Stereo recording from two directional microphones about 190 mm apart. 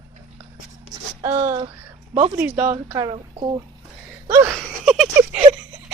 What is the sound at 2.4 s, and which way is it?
Speech, 10° right (ahead or behind).